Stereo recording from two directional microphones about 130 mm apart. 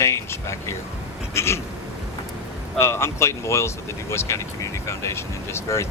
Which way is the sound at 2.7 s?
20° left (ahead or behind).